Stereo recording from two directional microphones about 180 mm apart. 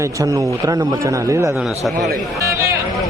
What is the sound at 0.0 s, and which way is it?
A man's voice, 20° right (ahead or behind).